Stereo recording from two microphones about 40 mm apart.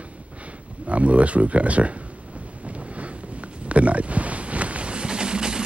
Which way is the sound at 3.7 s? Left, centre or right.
Right.